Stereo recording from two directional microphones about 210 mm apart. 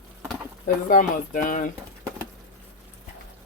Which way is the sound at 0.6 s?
40° left (ahead or behind).